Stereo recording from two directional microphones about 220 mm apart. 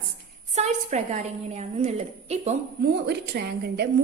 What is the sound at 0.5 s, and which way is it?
A woman's voice, 30° right (ahead or behind).